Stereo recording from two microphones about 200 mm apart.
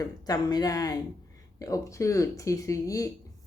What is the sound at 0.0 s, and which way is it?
Speech, 20° left (ahead or behind).